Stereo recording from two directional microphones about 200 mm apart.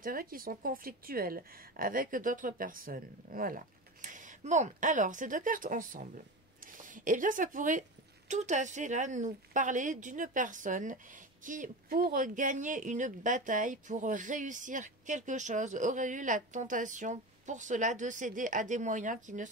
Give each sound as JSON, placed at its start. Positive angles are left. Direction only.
{"t": 0.0, "sound": "a woman's voice", "side_deg": -45}